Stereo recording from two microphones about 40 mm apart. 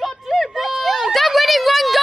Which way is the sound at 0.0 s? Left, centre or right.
Centre.